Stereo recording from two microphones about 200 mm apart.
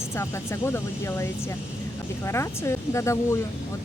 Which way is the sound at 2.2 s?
15° left (ahead or behind).